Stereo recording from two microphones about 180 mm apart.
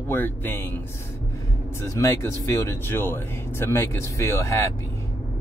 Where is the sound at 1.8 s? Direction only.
15° left (ahead or behind).